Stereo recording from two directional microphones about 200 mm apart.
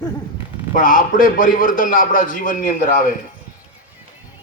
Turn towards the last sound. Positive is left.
turn(degrees=45)  # may be behind; listen again after turning